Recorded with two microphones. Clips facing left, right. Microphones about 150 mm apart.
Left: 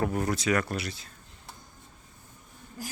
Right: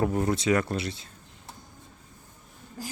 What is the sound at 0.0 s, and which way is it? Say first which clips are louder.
Speech: right 3 dB; 25° right (ahead or behind).